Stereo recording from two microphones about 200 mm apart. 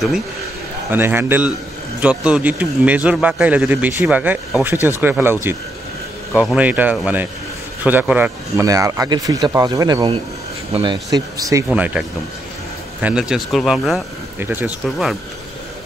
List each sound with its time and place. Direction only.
0.9 s a man's voice: 10° right (ahead or behind)